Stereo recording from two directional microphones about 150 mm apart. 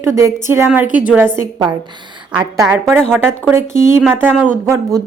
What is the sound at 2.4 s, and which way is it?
Speech, 20° right (ahead or behind).